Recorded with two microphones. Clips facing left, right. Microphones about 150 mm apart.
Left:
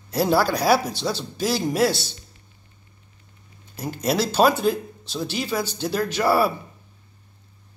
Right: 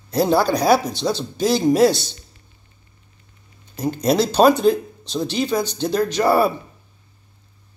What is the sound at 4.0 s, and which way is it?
Speech, 5° left (ahead or behind).